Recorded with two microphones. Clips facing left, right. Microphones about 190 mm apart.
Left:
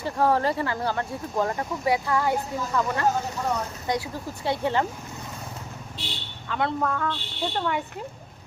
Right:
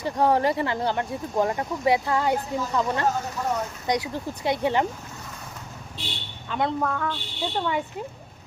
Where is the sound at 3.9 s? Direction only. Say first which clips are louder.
Right 2 dB; 15° right (ahead or behind).